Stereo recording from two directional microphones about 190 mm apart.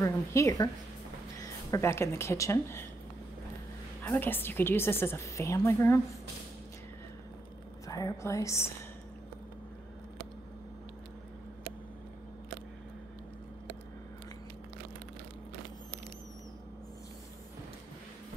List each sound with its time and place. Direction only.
0.0 s a woman's voice: 15° left (ahead or behind)
1.7 s a woman's voice: 15° left (ahead or behind)
4.0 s a woman's voice: 10° left (ahead or behind)
7.8 s a woman's voice: 15° left (ahead or behind)